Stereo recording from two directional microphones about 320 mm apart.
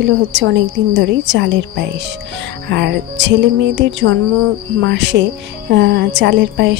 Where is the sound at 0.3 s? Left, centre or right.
Right.